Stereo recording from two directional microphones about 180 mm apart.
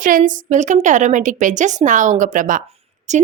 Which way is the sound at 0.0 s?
50° right (ahead or behind).